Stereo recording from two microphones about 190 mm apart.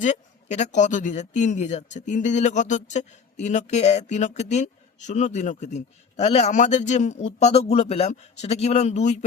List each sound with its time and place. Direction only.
0.0 s speech: 40° left (ahead or behind)